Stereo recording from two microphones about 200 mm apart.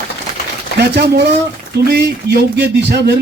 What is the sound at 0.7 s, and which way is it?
Speech, 55° right (ahead or behind).